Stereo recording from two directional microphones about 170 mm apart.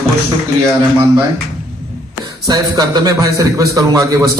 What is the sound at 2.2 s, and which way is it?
Speech, 20° right (ahead or behind).